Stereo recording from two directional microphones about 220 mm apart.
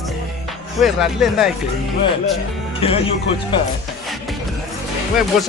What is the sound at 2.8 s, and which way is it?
Speech, 25° left (ahead or behind).